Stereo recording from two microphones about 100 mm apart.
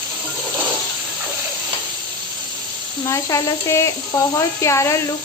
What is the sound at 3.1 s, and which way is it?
Speech, 30° left (ahead or behind).